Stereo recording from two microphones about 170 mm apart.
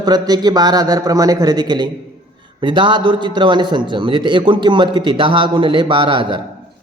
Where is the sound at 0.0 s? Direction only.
25° right (ahead or behind).